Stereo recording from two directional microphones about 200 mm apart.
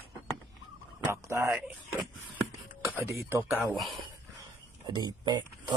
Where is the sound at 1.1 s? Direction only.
15° right (ahead or behind).